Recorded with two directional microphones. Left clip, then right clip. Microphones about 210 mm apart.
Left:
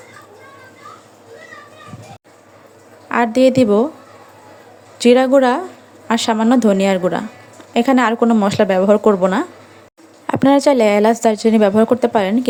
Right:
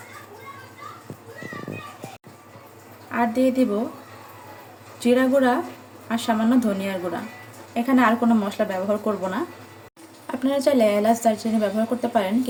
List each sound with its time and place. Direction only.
3.1 s a woman's voice: 45° left (ahead or behind)
4.9 s speech: 45° left (ahead or behind)